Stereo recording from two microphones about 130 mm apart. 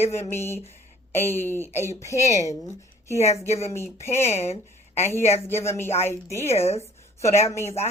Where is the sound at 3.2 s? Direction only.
55° left (ahead or behind).